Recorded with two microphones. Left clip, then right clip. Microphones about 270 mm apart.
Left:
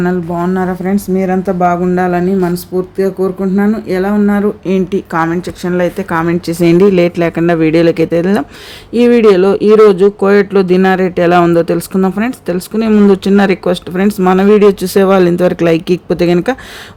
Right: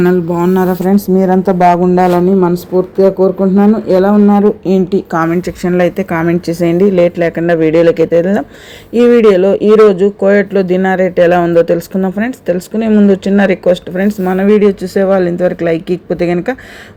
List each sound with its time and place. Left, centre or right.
0.0 s a man's voice: centre
12.9 s speech: centre